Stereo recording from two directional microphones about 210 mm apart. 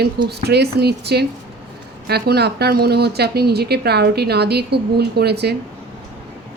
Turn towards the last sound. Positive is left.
turn(degrees=-50)  # may be behind; listen again after turning